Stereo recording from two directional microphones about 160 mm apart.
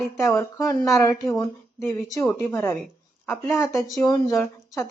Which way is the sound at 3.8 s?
Centre (ahead or behind).